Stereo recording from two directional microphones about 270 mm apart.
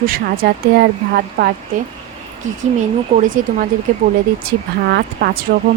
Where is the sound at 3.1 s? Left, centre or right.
Right.